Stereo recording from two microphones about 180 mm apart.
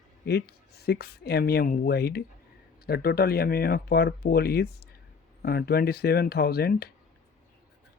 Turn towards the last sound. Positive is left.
turn(degrees=60)  # may be behind; listen again after turning